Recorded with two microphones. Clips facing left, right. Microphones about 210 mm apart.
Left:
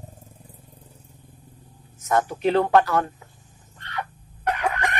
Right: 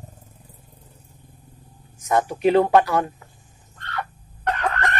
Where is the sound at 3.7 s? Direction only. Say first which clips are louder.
Right 1 dB; 15° left (ahead or behind).